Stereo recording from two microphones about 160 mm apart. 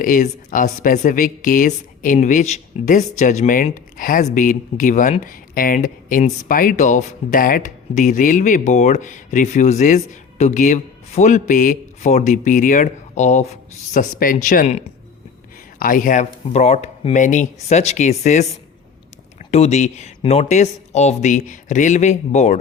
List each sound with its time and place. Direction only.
0.0 s a woman's voice: 55° left (ahead or behind)
13.9 s a woman's voice: 55° left (ahead or behind)